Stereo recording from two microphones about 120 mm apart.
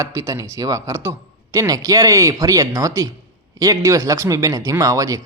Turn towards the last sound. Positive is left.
turn(degrees=-30)  # may be behind; listen again after turning